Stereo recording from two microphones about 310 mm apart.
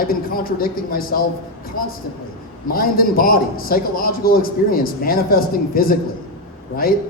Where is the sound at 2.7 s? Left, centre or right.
Left.